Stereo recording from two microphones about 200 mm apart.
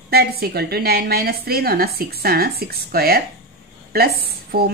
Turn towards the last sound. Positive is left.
turn(degrees=-50)  # may be behind; listen again after turning